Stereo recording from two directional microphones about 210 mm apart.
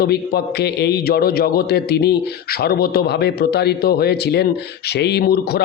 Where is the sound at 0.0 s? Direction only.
50° left (ahead or behind).